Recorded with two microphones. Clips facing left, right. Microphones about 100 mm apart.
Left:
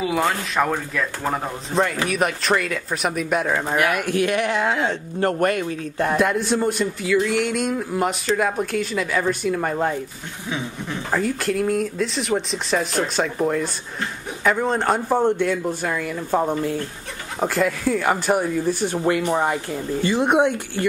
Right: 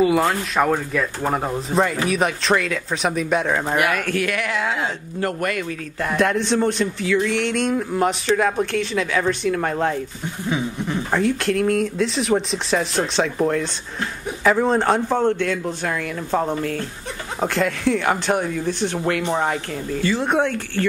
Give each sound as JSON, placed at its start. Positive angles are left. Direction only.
{"t": 0.0, "sound": "speech", "side_deg": 0}
{"t": 3.9, "sound": "speech", "side_deg": 15}
{"t": 4.2, "sound": "speech", "side_deg": 25}
{"t": 5.2, "sound": "speech", "side_deg": 35}
{"t": 6.1, "sound": "speech", "side_deg": 5}
{"t": 15.0, "sound": "speech", "side_deg": 10}
{"t": 20.0, "sound": "speech", "side_deg": 15}